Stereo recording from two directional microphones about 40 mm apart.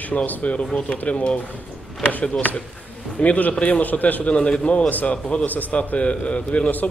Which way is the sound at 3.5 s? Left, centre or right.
Left.